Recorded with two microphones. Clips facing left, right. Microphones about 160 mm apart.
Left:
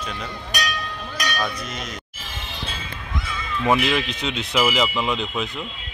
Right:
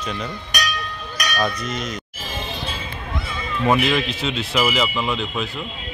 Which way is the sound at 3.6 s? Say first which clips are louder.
Right 2 dB; 15° left (ahead or behind).